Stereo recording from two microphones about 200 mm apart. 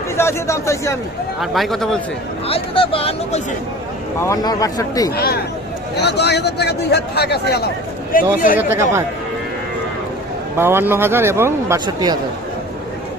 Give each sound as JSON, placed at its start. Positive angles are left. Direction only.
{"t": 0.2, "sound": "speech", "side_deg": 15}
{"t": 1.4, "sound": "speech", "side_deg": 0}
{"t": 2.5, "sound": "speech", "side_deg": 25}
{"t": 4.2, "sound": "speech", "side_deg": 15}
{"t": 5.1, "sound": "speech", "side_deg": 50}
{"t": 8.1, "sound": "speech", "side_deg": 45}
{"t": 8.5, "sound": "a man's voice", "side_deg": -10}
{"t": 10.6, "sound": "a man's voice", "side_deg": -10}